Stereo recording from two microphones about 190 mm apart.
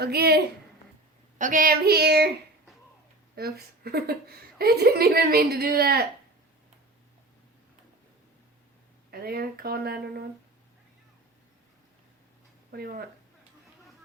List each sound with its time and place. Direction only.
0.0 s a woman's voice: 55° right (ahead or behind)
3.3 s a woman's voice: 55° right (ahead or behind)
9.0 s speech: 55° right (ahead or behind)
12.7 s speech: 55° right (ahead or behind)